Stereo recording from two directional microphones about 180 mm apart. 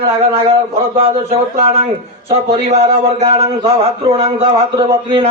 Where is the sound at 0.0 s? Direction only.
35° right (ahead or behind).